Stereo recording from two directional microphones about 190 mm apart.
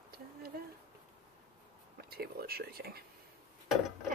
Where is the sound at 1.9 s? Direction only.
55° right (ahead or behind).